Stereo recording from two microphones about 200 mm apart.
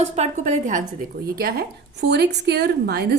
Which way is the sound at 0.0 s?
35° right (ahead or behind).